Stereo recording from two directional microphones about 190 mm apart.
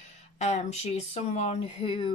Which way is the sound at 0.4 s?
40° left (ahead or behind).